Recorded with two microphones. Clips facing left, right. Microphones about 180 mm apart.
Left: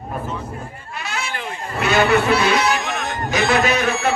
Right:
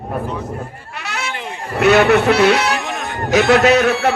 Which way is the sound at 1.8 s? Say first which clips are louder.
Right 5 dB; 70° right (ahead or behind).